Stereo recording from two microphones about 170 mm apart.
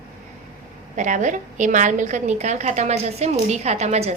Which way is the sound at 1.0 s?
45° right (ahead or behind).